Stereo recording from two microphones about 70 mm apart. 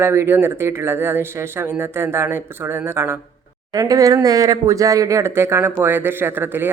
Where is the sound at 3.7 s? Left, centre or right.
Right.